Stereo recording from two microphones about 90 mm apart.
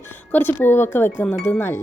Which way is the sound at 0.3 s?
20° left (ahead or behind).